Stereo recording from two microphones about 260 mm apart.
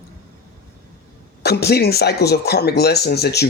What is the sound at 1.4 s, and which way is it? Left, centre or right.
Speech, left.